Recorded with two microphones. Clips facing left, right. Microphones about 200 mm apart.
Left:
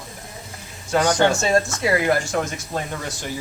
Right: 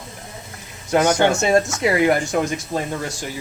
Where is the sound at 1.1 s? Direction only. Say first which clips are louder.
Right 1 dB; 10° right (ahead or behind).